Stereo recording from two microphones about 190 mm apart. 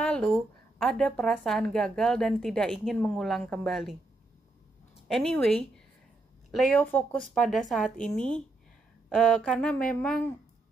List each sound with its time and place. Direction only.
0.0 s speech: 5° left (ahead or behind)
5.0 s speech: centre (ahead or behind)